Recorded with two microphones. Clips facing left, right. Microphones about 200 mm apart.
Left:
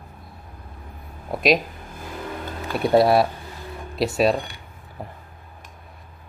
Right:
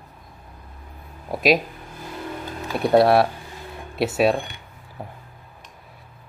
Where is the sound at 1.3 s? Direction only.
5° right (ahead or behind).